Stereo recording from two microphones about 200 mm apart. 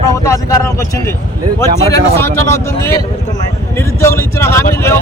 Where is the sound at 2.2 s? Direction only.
15° left (ahead or behind).